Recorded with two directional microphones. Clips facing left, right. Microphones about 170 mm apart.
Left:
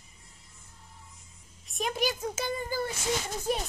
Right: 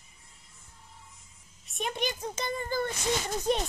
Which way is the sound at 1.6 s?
Centre (ahead or behind).